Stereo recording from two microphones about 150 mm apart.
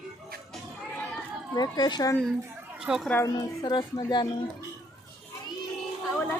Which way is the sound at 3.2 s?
25° left (ahead or behind).